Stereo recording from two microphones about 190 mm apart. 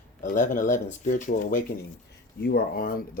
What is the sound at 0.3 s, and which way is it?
Speech, 45° left (ahead or behind).